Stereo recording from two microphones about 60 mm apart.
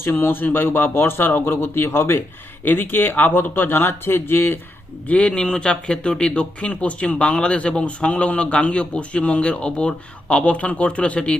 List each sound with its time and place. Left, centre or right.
0.0 s speech: left
5.0 s speech: centre